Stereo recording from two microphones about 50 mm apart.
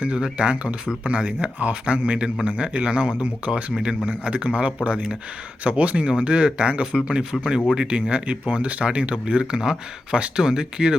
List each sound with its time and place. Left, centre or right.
0.0 s speech: right